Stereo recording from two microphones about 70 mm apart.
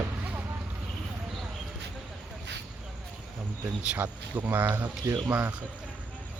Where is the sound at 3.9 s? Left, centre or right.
Right.